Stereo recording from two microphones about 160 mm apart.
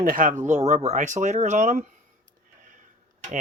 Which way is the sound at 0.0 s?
55° right (ahead or behind).